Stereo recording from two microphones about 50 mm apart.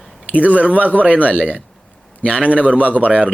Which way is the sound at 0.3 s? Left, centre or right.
Right.